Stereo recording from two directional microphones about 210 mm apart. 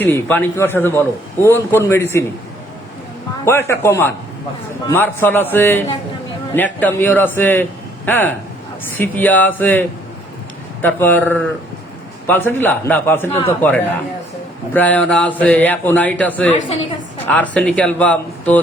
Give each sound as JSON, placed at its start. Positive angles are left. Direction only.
{"t": 0.0, "sound": "a man's voice", "side_deg": 10}
{"t": 3.4, "sound": "a man's voice", "side_deg": 10}
{"t": 16.5, "sound": "a woman's voice", "side_deg": 35}
{"t": 17.5, "sound": "a man's voice", "side_deg": 5}